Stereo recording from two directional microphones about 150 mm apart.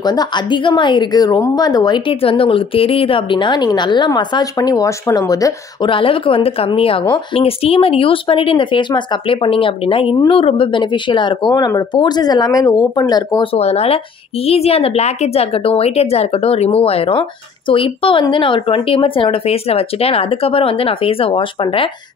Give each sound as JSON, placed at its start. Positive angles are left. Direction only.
{"t": 0.0, "sound": "a woman's voice", "side_deg": 25}
{"t": 13.6, "sound": "a woman's voice", "side_deg": 45}